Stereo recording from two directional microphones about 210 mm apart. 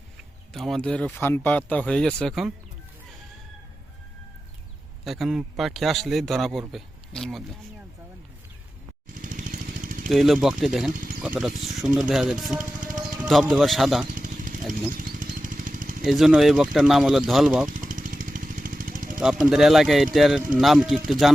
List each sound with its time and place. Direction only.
0.5 s a man's voice: centre (ahead or behind)
5.0 s a man's voice: centre (ahead or behind)
9.2 s a sound: 40° right (ahead or behind)
10.1 s a man's voice: centre (ahead or behind)
12.5 s music: 40° right (ahead or behind)
13.0 s speech: centre (ahead or behind)
14.7 s a sound: 40° right (ahead or behind)
16.0 s a man's voice: centre (ahead or behind)
17.7 s vehicle: 40° right (ahead or behind)
19.2 s a man's voice: 5° right (ahead or behind)